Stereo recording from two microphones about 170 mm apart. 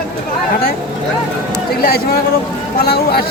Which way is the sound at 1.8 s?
65° left (ahead or behind).